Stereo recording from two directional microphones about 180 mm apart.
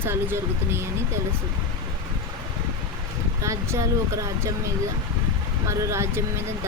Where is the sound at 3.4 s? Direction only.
15° right (ahead or behind).